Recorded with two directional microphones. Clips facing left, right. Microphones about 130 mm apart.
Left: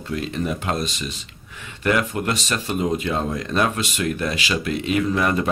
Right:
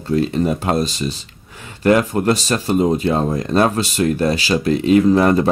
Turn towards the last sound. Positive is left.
turn(degrees=-35)  # may be behind; listen again after turning